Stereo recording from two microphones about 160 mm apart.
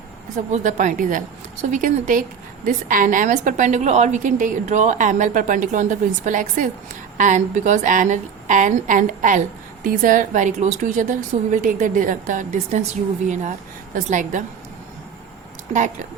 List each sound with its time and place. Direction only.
0.3 s a woman's voice: 50° right (ahead or behind)